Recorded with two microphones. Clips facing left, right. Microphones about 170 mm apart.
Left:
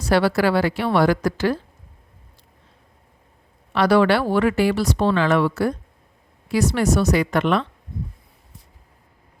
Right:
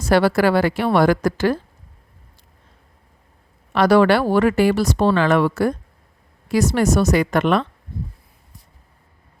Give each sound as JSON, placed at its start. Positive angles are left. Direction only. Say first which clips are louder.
{"t": 0.0, "sound": "speech", "louder": "right 2 dB", "side_deg": -45}
{"t": 3.7, "sound": "speech", "louder": "right 2 dB", "side_deg": -45}